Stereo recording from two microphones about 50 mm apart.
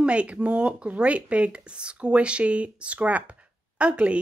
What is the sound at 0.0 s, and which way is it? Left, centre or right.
Speech, right.